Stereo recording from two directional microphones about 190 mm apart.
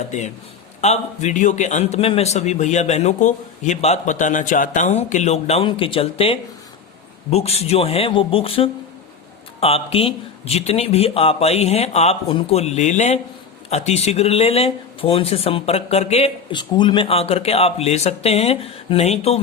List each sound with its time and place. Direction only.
0.8 s speech: 35° left (ahead or behind)